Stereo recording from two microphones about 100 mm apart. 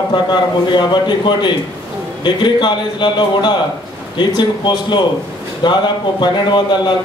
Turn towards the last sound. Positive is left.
turn(degrees=50)  # may be behind; listen again after turning